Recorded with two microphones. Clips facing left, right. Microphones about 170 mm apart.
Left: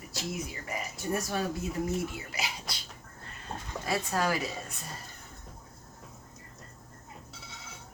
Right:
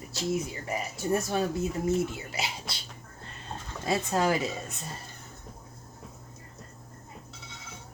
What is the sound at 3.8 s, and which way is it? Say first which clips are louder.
Speech: right 4 dB; 20° right (ahead or behind).